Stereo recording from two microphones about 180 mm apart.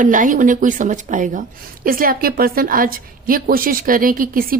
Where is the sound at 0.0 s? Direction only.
45° right (ahead or behind).